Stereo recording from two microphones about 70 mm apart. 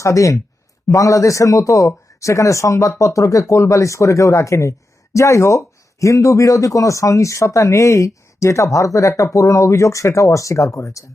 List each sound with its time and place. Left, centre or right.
0.0 s speech: left